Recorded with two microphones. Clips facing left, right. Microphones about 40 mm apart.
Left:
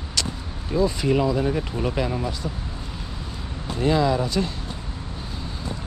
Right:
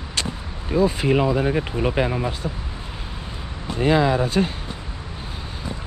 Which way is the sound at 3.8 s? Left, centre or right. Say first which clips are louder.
Right 2 dB; right.